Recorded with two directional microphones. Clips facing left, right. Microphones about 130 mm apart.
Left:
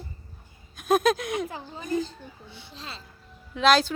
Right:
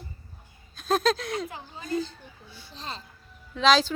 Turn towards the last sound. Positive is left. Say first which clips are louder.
# left 1 dB
turn(degrees=5)  # may be behind; listen again after turning